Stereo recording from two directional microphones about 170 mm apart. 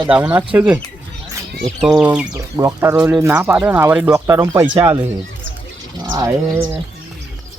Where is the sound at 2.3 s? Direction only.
20° right (ahead or behind).